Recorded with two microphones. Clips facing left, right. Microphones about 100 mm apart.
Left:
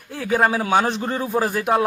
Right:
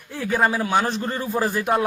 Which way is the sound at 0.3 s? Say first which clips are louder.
Left 2 dB; 15° left (ahead or behind).